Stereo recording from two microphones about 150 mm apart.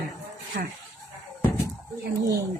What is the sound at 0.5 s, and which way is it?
Speech, 90° right.